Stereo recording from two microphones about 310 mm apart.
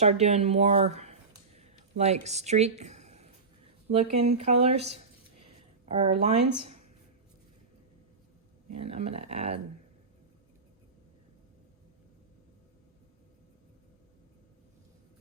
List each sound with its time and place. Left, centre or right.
0.0 s speech: right
1.5 s a sound: right
2.2 s speech: right
8.7 s speech: centre